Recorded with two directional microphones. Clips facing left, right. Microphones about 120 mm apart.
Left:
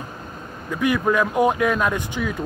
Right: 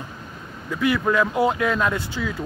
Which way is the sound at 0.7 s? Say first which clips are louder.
Left 1 dB; 15° left (ahead or behind).